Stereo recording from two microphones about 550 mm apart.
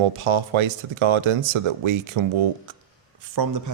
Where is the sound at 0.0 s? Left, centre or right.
Right.